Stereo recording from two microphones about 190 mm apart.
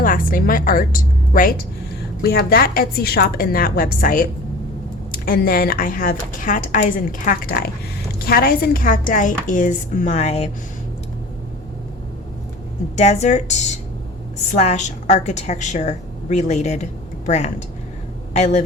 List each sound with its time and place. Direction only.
0.0 s a woman's voice: 45° left (ahead or behind)
13.0 s a woman's voice: 35° left (ahead or behind)